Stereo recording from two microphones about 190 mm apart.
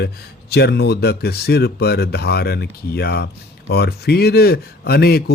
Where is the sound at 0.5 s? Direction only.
60° left (ahead or behind).